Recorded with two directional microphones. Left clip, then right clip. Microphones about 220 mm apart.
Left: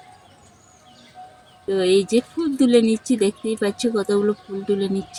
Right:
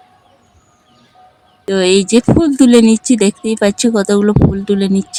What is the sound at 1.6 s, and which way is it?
Speech, 50° right (ahead or behind).